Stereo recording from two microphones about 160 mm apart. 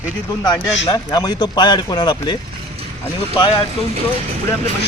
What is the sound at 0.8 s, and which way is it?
Speech, 25° left (ahead or behind).